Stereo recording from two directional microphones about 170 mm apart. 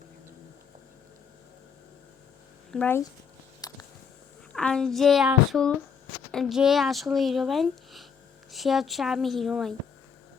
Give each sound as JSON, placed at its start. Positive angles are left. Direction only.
{"t": 2.7, "sound": "speech", "side_deg": 10}
{"t": 3.6, "sound": "a sound", "side_deg": 20}
{"t": 4.5, "sound": "speech", "side_deg": 5}